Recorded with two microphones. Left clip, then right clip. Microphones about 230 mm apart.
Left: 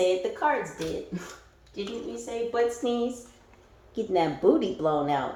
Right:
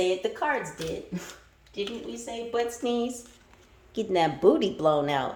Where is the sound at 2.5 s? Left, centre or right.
Right.